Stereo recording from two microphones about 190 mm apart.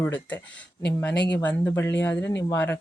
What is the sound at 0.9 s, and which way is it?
Speech, 10° left (ahead or behind).